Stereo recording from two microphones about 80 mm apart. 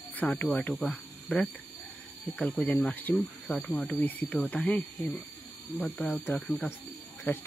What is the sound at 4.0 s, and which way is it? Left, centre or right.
Speech, left.